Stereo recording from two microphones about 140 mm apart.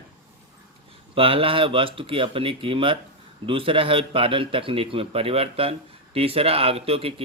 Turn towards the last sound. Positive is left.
turn(degrees=-45)  # may be behind; listen again after turning